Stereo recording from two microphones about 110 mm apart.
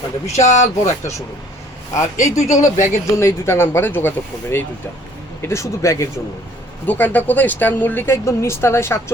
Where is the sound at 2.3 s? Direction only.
90° left.